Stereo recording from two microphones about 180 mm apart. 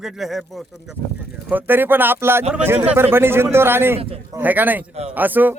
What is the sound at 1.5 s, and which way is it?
A man's voice, 10° right (ahead or behind).